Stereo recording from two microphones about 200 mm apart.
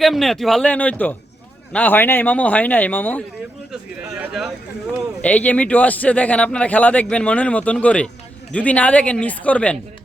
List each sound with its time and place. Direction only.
0.0 s a man's voice: centre (ahead or behind)
4.3 s a man's voice: centre (ahead or behind)